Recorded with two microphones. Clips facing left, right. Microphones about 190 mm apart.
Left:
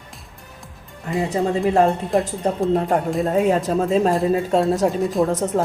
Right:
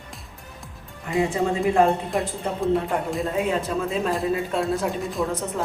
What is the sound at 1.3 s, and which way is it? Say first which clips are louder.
Speech: left 3 dB; 40° left (ahead or behind).